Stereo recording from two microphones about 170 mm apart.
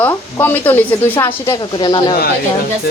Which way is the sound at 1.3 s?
25° left (ahead or behind).